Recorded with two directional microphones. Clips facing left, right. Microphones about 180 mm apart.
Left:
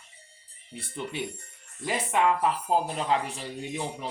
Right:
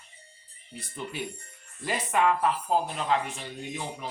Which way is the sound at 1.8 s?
20° left (ahead or behind).